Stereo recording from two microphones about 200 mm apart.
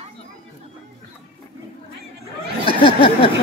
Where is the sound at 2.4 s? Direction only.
25° right (ahead or behind).